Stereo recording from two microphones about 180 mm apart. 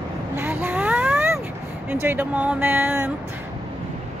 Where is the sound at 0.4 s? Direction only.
10° right (ahead or behind).